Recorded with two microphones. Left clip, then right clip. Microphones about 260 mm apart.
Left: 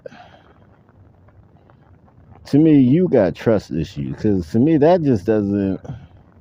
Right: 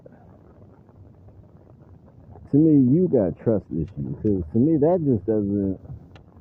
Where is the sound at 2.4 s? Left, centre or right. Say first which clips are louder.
Left 4 dB; left.